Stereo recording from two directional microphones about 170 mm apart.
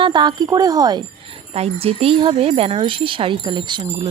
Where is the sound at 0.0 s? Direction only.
25° right (ahead or behind).